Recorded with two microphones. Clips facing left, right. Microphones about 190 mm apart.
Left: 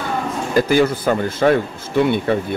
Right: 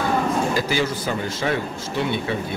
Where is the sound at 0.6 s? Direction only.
50° left (ahead or behind).